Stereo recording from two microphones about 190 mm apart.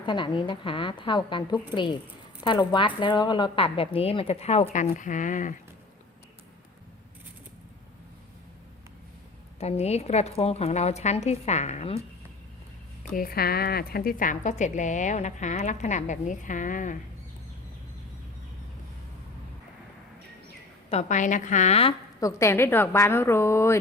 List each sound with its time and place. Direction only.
0.0 s speech: 25° left (ahead or behind); by 5.5 s 40° left (ahead or behind)
9.6 s a woman's voice: 35° left (ahead or behind)
13.0 s a woman's voice: 50° left (ahead or behind)
20.9 s a woman's voice: 40° left (ahead or behind)
22.2 s a woman's voice: 15° left (ahead or behind)